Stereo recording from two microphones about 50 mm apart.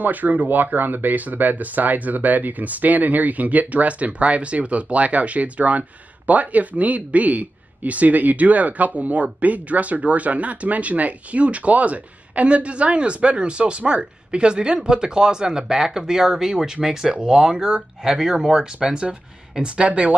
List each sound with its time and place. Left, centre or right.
0.0 s speech: right